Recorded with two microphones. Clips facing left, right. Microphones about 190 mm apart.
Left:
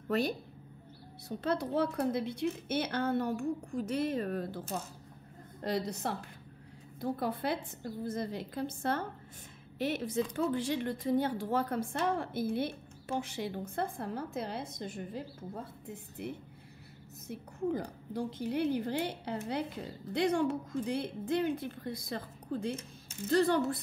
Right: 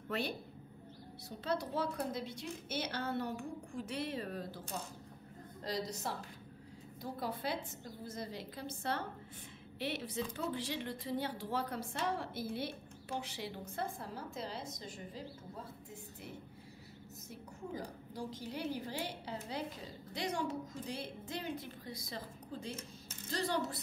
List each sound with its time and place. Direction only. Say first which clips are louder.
0.1 s a woman's voice: left 7 dB; 40° left (ahead or behind)
1.4 s a woman's voice: left 5 dB; 55° left (ahead or behind)
5.6 s a woman's voice: left 6 dB; 60° left (ahead or behind)
17.3 s a woman's voice: left 11 dB; 60° left (ahead or behind)